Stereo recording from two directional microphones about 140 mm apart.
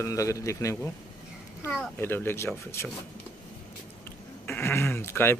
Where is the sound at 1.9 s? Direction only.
15° left (ahead or behind).